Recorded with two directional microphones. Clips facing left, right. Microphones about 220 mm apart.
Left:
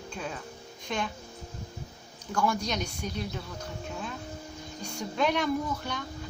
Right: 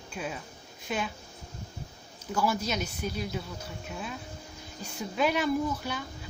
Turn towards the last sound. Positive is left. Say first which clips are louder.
# right 2 dB
turn(degrees=-5)  # may be behind; listen again after turning